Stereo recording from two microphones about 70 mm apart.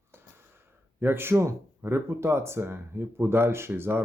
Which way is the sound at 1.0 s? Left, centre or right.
Right.